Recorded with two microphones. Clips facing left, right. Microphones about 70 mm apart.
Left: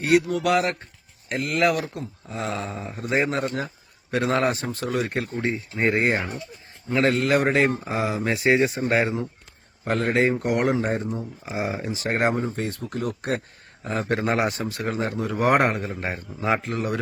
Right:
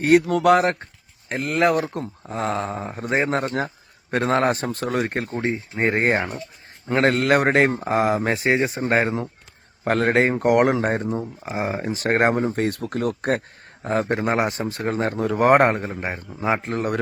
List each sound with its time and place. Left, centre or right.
0.0 s a man's voice: right
1.9 s a man's voice: right
6.0 s a man's voice: right
9.8 s speech: right
11.4 s a man's voice: right
14.1 s a man's voice: right
16.0 s a man's voice: right
16.6 s speech: right